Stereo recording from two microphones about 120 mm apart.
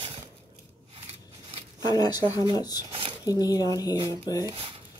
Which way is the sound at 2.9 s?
50° right (ahead or behind).